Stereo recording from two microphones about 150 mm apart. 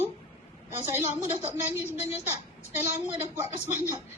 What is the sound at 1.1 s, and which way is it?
Speech, 15° right (ahead or behind).